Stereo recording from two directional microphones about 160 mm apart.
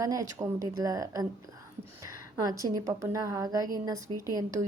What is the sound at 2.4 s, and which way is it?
Speech, 25° right (ahead or behind).